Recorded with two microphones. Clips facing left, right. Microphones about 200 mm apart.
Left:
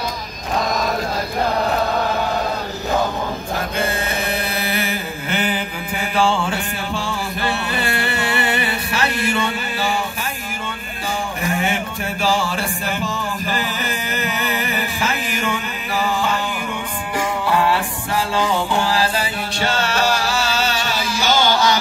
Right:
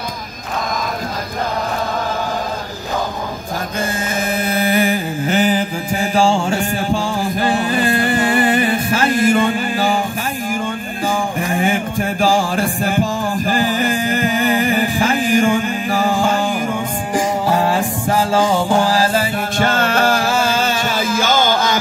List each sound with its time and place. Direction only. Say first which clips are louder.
4.5 s mantra: right 7 dB; 45° right (ahead or behind)
11.6 s music: right 5 dB; 45° right (ahead or behind)